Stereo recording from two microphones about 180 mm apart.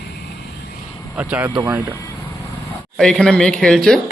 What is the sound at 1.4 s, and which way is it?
Speech, 20° right (ahead or behind).